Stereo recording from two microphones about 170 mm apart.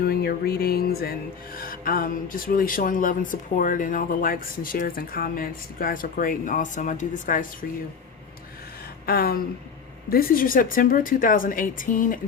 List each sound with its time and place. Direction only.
0.0 s music: 65° left (ahead or behind)
1.5 s speech: 55° left (ahead or behind)
9.0 s speech: 60° left (ahead or behind)